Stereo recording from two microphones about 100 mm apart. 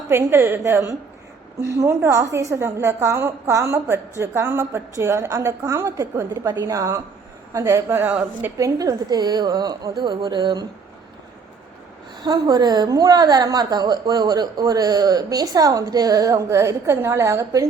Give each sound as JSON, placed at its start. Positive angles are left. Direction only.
{"t": 0.1, "sound": "a woman's voice", "side_deg": -25}
{"t": 8.5, "sound": "a woman's voice", "side_deg": -30}
{"t": 12.2, "sound": "a woman's voice", "side_deg": -45}